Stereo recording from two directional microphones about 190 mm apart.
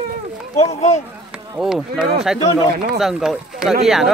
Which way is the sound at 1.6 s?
Centre (ahead or behind).